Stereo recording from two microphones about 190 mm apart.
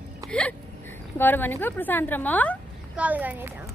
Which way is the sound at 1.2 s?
10° left (ahead or behind).